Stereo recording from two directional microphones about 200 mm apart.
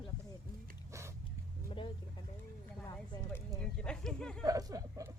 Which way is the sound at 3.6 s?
5° left (ahead or behind).